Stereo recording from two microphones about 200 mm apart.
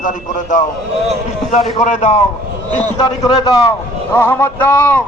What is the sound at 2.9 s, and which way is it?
Speech, 20° left (ahead or behind).